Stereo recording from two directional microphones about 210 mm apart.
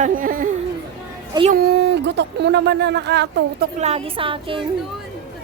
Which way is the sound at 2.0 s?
55° right (ahead or behind).